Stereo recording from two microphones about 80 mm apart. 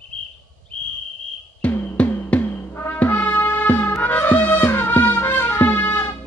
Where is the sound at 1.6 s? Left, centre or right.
Centre.